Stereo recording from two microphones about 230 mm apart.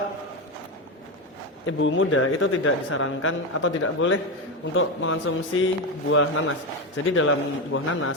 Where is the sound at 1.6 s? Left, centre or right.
Left.